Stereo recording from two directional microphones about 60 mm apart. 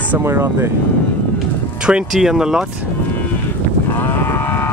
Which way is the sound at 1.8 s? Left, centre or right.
Centre.